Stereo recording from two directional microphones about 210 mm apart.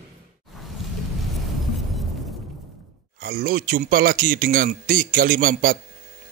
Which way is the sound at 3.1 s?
45° right (ahead or behind).